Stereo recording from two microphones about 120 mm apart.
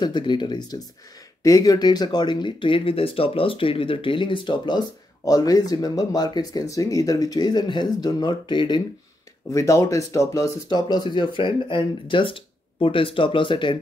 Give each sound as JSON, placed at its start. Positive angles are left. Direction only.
{"t": 0.0, "sound": "speech", "side_deg": 40}
{"t": 9.5, "sound": "speech", "side_deg": 25}
{"t": 10.7, "sound": "speech", "side_deg": 40}